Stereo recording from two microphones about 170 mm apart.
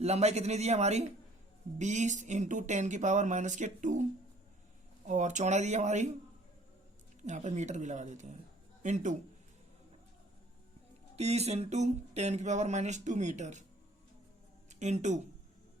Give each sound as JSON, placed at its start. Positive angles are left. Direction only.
{"t": 0.0, "sound": "speech", "side_deg": -40}
{"t": 5.0, "sound": "speech", "side_deg": -45}
{"t": 7.3, "sound": "speech", "side_deg": -45}
{"t": 11.2, "sound": "speech", "side_deg": -40}
{"t": 14.7, "sound": "speech", "side_deg": -45}